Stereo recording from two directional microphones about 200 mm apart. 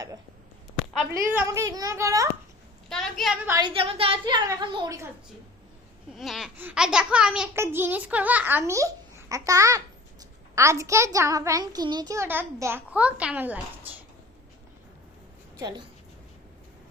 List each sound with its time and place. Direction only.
1.1 s a child's voice: 10° right (ahead or behind)
2.9 s a woman's voice: centre (ahead or behind)
3.4 s a child's voice: 15° right (ahead or behind)
3.8 s a woman's voice: 30° right (ahead or behind)
6.1 s a child's voice: centre (ahead or behind)
15.5 s a woman's voice: 20° right (ahead or behind)